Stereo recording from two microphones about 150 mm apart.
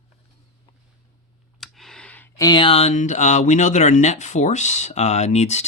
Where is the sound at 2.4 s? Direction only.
30° left (ahead or behind).